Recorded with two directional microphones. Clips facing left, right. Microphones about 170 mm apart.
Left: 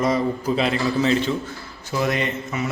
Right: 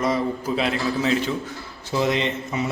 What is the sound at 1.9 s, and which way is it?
Speech, 25° right (ahead or behind).